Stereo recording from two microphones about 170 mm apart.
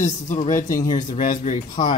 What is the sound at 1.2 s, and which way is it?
Speech, 50° left (ahead or behind).